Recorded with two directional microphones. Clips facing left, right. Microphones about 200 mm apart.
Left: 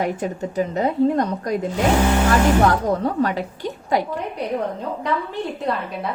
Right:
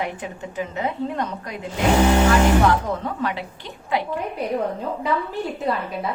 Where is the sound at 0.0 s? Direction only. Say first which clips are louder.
Left 6 dB; 40° left (ahead or behind).